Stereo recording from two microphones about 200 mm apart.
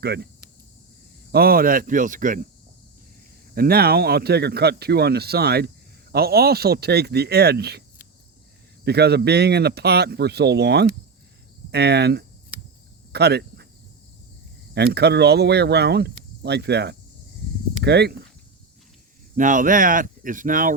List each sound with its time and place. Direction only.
0.0 s speech: 55° right (ahead or behind)
1.3 s a man's voice: 50° right (ahead or behind)
3.5 s a man's voice: 50° right (ahead or behind)
14.8 s speech: 55° right (ahead or behind)
19.4 s a man's voice: 40° right (ahead or behind)